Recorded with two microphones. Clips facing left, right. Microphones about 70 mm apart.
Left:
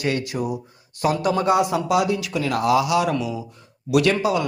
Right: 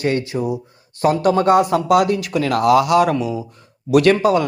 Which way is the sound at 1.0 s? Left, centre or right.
Right.